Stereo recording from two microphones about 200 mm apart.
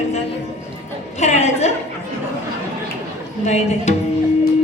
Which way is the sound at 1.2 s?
35° left (ahead or behind).